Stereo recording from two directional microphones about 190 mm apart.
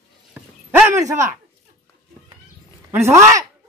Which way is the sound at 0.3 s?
15° right (ahead or behind).